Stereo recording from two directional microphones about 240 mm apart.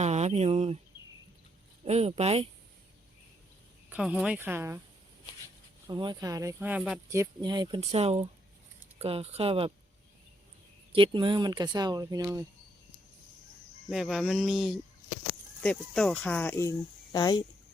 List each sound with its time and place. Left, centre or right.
0.0 s speech: right
1.8 s speech: right
3.8 s speech: centre
5.9 s speech: centre
10.9 s speech: right
13.9 s a sound: centre
15.6 s speech: centre